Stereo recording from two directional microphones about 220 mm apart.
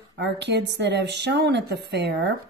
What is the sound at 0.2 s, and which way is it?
Speech, 50° right (ahead or behind).